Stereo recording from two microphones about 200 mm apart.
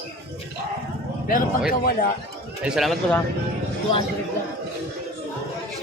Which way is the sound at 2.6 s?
Centre (ahead or behind).